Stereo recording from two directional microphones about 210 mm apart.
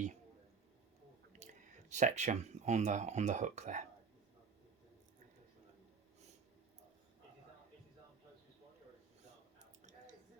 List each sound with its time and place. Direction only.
1.3 s speech: 35° right (ahead or behind)